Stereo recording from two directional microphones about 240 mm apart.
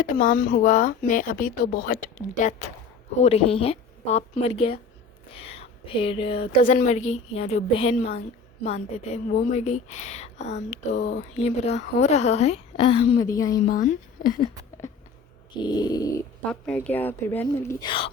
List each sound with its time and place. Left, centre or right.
0.0 s a woman's voice: left
6.6 s a woman's voice: left
13.2 s a woman's voice: centre
13.7 s speech: left
15.5 s a woman's voice: centre
16.5 s a woman's voice: centre; by 18.1 s left